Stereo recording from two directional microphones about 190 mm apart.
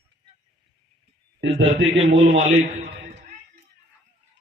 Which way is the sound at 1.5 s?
75° right (ahead or behind).